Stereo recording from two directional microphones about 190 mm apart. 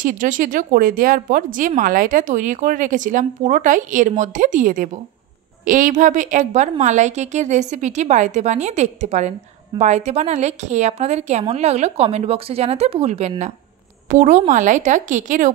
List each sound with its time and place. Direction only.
0.0 s a woman's voice: 45° right (ahead or behind)